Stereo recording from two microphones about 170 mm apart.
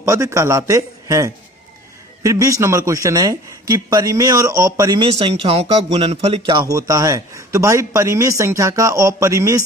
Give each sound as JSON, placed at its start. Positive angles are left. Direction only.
{"t": 0.0, "sound": "a man's voice", "side_deg": -15}
{"t": 5.2, "sound": "speech", "side_deg": -35}